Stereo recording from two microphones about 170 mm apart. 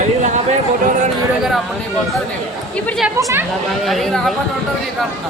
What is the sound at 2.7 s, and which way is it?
Speech, 5° left (ahead or behind).